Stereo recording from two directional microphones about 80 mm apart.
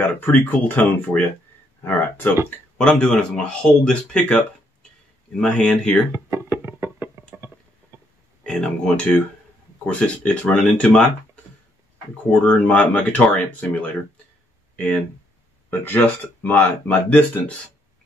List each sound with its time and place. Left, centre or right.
0.0 s speech: left
2.8 s speech: centre
6.1 s music: right
7.3 s a sound: right
7.9 s burping: right
8.5 s speech: centre
12.3 s speech: centre